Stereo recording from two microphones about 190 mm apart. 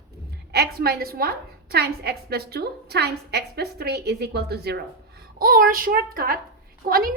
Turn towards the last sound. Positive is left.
turn(degrees=-50)  # may be behind; listen again after turning